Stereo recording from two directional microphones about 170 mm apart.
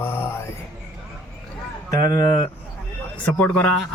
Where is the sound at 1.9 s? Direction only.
20° left (ahead or behind).